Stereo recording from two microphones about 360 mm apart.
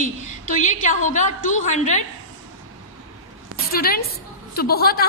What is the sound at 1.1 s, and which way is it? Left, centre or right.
Speech, left.